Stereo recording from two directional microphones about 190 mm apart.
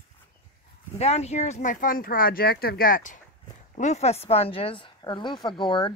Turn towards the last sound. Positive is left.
turn(degrees=25)  # may be behind; listen again after turning